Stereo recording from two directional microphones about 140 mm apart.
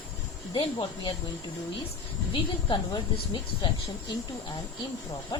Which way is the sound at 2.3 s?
35° left (ahead or behind).